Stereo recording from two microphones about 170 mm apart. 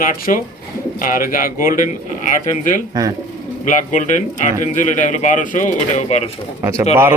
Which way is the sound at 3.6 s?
45° left (ahead or behind).